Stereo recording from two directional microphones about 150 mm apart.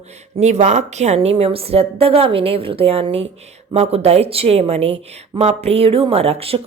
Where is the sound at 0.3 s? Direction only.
50° right (ahead or behind).